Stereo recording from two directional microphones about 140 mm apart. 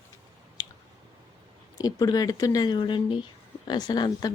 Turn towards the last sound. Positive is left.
turn(degrees=30)  # may be behind; listen again after turning